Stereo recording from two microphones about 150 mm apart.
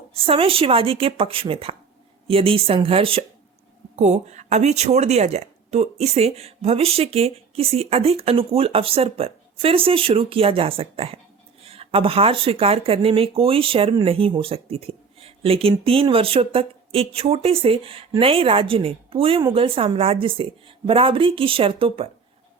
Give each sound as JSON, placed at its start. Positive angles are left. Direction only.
{"t": 0.1, "sound": "speech", "side_deg": -40}
{"t": 3.9, "sound": "speech", "side_deg": -50}